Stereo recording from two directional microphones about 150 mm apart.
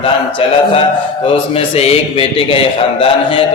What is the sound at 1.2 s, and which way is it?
A man's voice, 40° left (ahead or behind).